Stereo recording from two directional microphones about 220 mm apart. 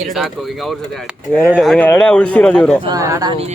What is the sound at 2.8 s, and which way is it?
Speech, 15° right (ahead or behind).